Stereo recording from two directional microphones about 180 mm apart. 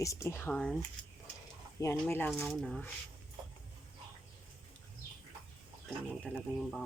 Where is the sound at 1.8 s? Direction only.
15° left (ahead or behind).